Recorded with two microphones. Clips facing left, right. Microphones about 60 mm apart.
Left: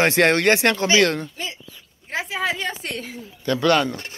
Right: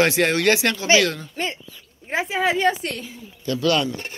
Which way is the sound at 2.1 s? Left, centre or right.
Centre.